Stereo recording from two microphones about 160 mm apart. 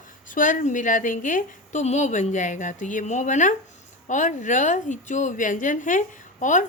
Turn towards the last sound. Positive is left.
turn(degrees=50)  # may be behind; listen again after turning